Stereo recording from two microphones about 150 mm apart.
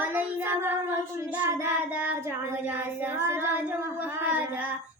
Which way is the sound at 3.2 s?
15° right (ahead or behind).